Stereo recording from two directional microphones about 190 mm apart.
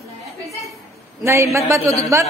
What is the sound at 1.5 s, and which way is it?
Speech, 15° right (ahead or behind).